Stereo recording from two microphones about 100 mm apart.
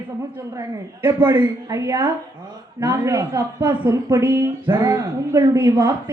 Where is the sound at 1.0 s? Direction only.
25° right (ahead or behind).